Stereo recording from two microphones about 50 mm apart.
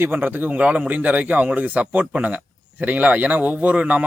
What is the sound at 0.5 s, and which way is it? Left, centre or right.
Speech, right.